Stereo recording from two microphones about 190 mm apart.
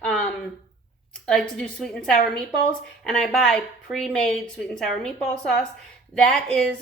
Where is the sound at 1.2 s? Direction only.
5° left (ahead or behind).